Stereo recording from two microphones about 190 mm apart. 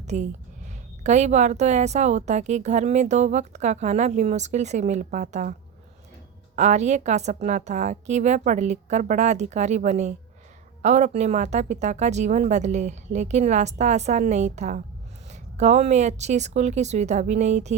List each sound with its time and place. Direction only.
0.0 s a woman's voice: 35° right (ahead or behind)
6.6 s a woman's voice: 40° right (ahead or behind)